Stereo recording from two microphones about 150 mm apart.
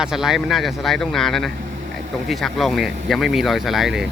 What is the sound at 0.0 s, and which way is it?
Speech, 5° right (ahead or behind).